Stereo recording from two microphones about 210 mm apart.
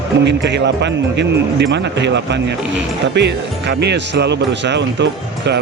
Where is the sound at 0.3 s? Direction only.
55° right (ahead or behind).